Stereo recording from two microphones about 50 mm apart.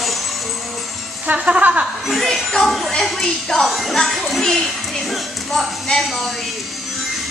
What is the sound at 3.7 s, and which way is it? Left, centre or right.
Music, centre.